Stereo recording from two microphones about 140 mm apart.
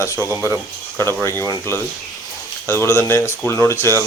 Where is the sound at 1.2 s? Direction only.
20° left (ahead or behind).